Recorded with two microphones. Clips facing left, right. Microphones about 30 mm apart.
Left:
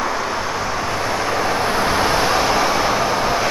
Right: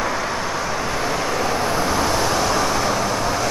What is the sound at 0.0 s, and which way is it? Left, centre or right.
Vehicle, centre.